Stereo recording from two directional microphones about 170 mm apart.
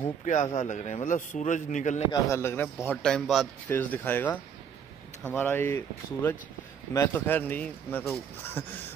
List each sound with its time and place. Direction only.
0.2 s a man's voice: 45° left (ahead or behind)
2.1 s a man's voice: 15° left (ahead or behind)